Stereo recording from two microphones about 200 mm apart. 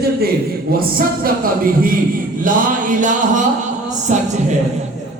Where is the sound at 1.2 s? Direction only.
45° right (ahead or behind).